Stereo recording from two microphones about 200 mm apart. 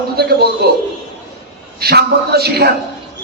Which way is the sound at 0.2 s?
55° right (ahead or behind).